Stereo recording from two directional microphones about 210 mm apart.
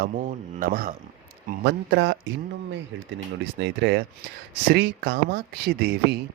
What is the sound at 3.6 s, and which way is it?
Speech, 55° right (ahead or behind).